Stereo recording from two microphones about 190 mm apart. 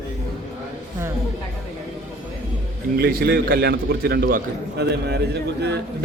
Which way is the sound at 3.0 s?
50° right (ahead or behind).